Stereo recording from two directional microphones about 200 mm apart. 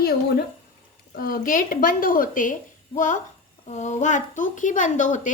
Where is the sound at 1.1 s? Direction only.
45° left (ahead or behind).